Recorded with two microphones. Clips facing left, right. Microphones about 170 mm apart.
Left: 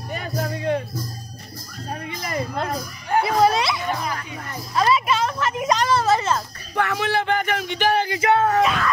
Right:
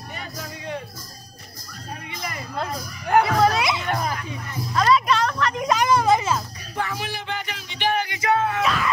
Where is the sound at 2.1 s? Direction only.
40° left (ahead or behind).